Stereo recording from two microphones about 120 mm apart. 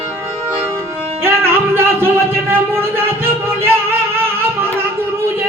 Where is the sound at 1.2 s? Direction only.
20° right (ahead or behind).